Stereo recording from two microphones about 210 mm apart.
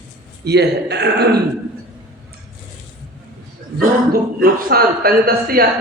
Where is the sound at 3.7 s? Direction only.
45° right (ahead or behind).